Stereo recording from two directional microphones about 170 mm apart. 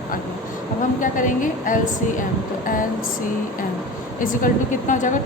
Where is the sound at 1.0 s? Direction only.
50° left (ahead or behind).